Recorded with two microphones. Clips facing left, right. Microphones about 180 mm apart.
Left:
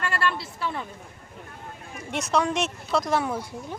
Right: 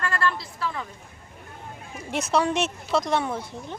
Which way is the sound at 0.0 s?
25° left (ahead or behind).